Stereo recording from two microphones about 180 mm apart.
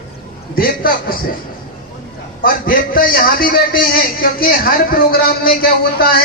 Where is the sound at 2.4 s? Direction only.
50° left (ahead or behind).